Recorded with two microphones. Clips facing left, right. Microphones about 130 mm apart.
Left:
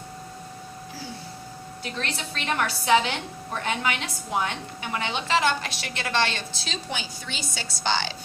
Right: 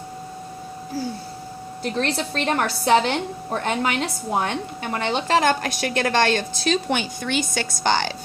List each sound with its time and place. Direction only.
1.8 s a woman's voice: 45° right (ahead or behind)